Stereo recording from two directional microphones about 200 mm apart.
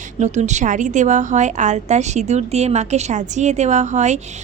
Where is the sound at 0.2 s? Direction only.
35° right (ahead or behind).